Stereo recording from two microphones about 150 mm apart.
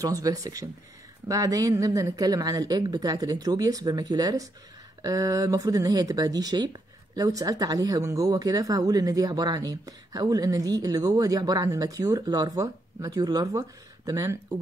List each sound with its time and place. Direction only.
0.0 s speech: 25° right (ahead or behind)